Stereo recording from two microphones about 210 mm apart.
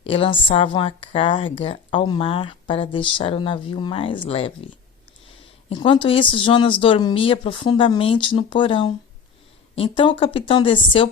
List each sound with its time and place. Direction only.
0.0 s speech: 25° left (ahead or behind)